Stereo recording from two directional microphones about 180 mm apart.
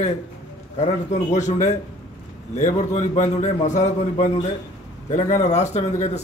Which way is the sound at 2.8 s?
40° left (ahead or behind).